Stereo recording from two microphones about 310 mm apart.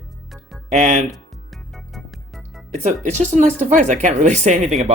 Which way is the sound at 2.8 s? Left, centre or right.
Right.